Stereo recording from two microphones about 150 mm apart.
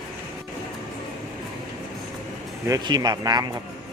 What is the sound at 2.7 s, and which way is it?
Speech, 25° right (ahead or behind).